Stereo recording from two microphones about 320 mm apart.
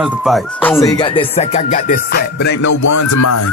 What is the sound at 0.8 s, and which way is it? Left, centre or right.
Music, centre.